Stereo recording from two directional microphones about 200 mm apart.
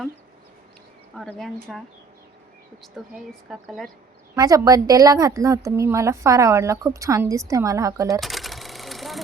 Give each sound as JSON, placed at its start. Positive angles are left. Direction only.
{"t": 1.1, "sound": "a woman's voice", "side_deg": 0}
{"t": 2.8, "sound": "a woman's voice", "side_deg": 0}
{"t": 4.4, "sound": "a woman's voice", "side_deg": -20}
{"t": 8.2, "sound": "sewing machine", "side_deg": 0}